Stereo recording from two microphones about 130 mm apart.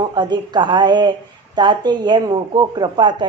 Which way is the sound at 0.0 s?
35° right (ahead or behind).